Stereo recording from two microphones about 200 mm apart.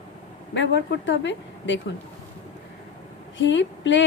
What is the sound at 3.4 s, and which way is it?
Speech, 65° left (ahead or behind).